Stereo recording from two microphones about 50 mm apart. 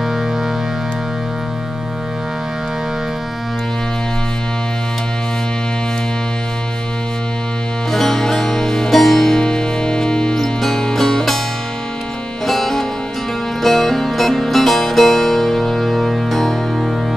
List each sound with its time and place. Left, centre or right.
7.9 s music: centre
9.4 s music: centre
12.4 s music: centre